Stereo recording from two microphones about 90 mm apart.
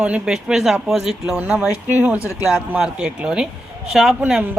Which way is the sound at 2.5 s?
5° right (ahead or behind).